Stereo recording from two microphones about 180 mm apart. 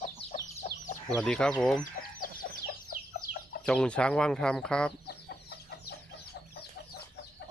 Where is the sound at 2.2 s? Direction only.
55° left (ahead or behind).